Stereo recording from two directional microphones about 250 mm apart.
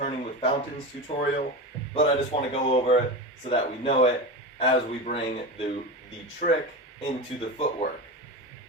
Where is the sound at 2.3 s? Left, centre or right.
Left.